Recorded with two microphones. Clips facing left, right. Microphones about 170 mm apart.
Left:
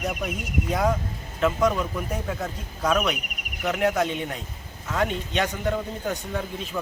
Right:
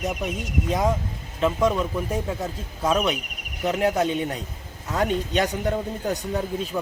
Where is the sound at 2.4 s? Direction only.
25° right (ahead or behind).